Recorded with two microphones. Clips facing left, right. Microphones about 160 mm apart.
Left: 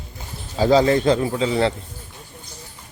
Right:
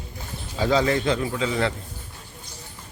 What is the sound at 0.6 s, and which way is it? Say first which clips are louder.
A man's voice: left 5 dB; 35° left (ahead or behind).